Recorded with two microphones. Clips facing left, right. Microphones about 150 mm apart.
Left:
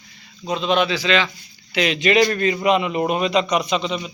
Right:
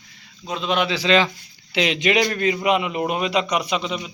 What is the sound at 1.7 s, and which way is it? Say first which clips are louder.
A man's voice: left 2 dB; 20° right (ahead or behind).